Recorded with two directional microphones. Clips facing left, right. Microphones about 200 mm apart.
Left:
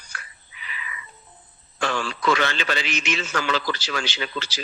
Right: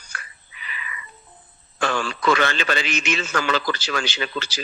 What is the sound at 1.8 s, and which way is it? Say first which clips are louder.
A man's voice: right 2 dB; 50° right (ahead or behind).